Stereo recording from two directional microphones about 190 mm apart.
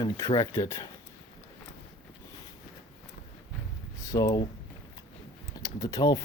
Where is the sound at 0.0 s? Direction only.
20° left (ahead or behind).